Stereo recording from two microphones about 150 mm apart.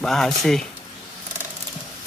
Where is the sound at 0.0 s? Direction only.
5° left (ahead or behind).